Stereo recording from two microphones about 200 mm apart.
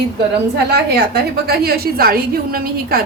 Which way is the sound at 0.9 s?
50° right (ahead or behind).